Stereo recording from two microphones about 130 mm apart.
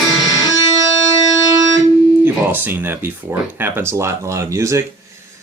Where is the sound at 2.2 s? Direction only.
15° right (ahead or behind).